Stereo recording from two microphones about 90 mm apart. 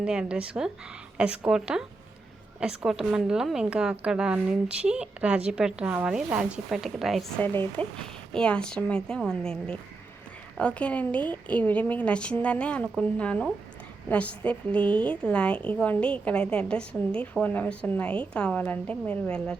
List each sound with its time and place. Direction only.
0.0 s a woman's voice: 10° right (ahead or behind)
7.3 s speech: 25° left (ahead or behind)
8.3 s a woman's voice: 10° left (ahead or behind)